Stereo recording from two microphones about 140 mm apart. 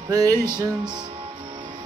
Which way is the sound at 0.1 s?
25° right (ahead or behind).